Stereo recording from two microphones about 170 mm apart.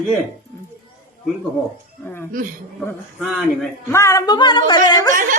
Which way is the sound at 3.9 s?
15° left (ahead or behind).